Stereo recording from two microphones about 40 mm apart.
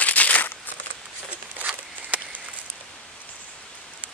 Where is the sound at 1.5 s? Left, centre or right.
Right.